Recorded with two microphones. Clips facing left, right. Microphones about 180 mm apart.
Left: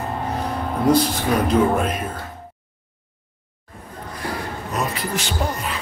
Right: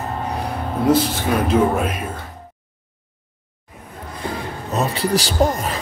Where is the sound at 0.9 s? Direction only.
5° right (ahead or behind).